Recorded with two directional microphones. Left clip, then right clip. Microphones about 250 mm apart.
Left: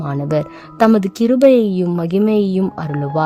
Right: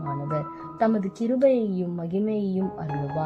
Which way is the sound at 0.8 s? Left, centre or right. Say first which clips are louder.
Left 11 dB; left.